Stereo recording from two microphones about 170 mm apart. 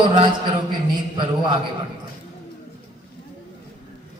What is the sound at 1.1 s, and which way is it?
Speech, 30° right (ahead or behind).